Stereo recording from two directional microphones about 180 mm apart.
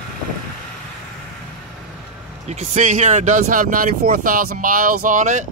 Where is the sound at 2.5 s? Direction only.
40° right (ahead or behind).